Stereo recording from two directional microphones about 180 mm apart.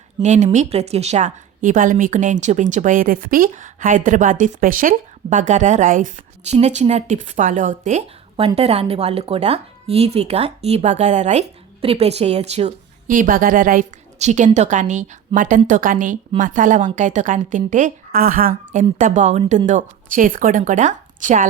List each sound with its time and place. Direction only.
0.2 s a woman's voice: 40° right (ahead or behind)